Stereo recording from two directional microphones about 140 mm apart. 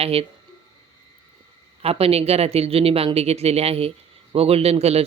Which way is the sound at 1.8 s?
45° right (ahead or behind).